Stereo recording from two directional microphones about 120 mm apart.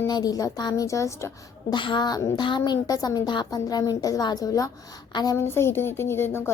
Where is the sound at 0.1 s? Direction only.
30° left (ahead or behind).